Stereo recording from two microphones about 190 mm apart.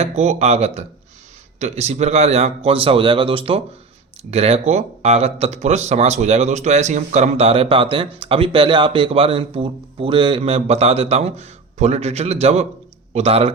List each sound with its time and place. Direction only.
0.0 s speech: 35° right (ahead or behind)